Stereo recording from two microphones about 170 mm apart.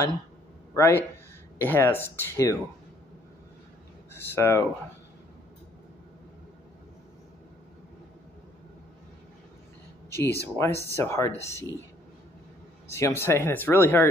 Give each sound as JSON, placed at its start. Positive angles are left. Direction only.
{"t": 0.7, "sound": "speech", "side_deg": 15}
{"t": 4.1, "sound": "speech", "side_deg": 15}
{"t": 10.1, "sound": "speech", "side_deg": 15}
{"t": 12.9, "sound": "speech", "side_deg": 15}